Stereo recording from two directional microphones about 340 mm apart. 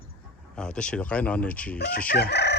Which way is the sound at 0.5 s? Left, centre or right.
Centre.